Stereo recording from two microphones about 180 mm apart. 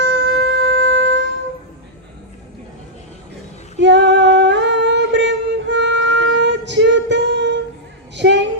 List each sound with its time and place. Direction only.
0.0 s shofar: 75° right (ahead or behind)
3.8 s singing: 75° right (ahead or behind)
8.1 s a sound: 75° right (ahead or behind)